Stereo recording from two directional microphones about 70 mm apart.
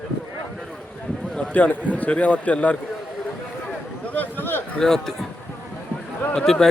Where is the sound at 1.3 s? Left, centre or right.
Left.